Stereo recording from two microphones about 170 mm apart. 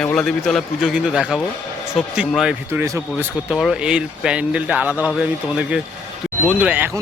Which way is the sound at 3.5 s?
Centre (ahead or behind).